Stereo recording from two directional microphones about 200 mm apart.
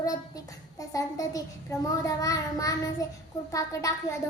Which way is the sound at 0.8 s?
15° left (ahead or behind).